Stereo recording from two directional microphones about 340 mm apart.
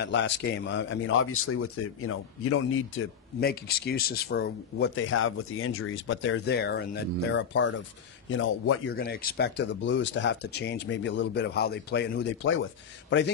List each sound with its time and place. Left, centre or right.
0.0 s speech: left